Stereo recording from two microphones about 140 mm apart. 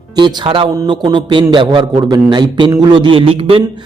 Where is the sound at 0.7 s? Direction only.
30° right (ahead or behind).